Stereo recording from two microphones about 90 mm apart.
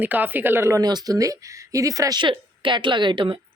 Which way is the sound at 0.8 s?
45° right (ahead or behind).